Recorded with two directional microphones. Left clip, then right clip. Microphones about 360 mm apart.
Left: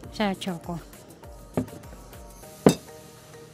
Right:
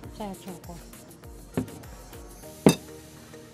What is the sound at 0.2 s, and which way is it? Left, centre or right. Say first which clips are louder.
Speech: left 10 dB; left.